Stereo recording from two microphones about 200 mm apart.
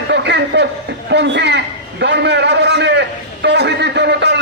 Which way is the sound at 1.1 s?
60° right (ahead or behind).